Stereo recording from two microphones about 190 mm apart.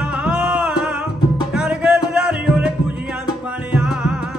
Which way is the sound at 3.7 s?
5° right (ahead or behind).